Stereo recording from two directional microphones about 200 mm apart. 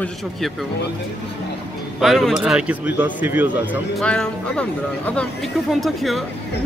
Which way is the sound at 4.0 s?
5° left (ahead or behind).